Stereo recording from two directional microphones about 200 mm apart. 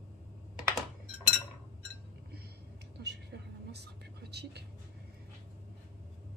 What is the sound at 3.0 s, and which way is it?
Vehicle, 55° right (ahead or behind).